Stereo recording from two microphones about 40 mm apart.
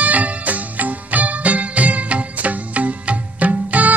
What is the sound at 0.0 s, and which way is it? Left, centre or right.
Music, right.